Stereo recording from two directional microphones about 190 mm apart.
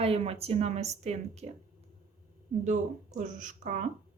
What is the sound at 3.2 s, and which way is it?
Speech, 40° right (ahead or behind).